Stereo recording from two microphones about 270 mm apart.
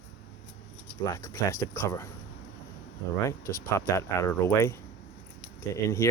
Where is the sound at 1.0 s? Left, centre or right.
Centre.